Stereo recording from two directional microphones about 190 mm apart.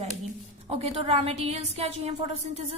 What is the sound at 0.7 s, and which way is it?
A woman's voice, 35° right (ahead or behind).